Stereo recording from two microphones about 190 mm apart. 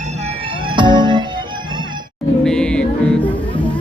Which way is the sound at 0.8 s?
25° right (ahead or behind).